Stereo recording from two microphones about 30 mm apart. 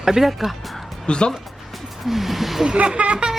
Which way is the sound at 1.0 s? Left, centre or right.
Left.